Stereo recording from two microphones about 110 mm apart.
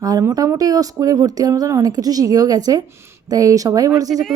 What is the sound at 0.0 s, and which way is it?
Speech, 30° right (ahead or behind).